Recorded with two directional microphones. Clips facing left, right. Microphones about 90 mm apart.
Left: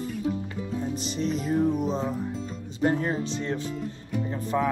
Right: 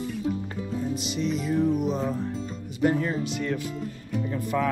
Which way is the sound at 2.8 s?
35° left (ahead or behind).